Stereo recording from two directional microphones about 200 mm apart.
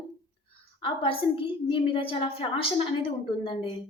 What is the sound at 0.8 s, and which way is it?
A woman's voice, 25° left (ahead or behind).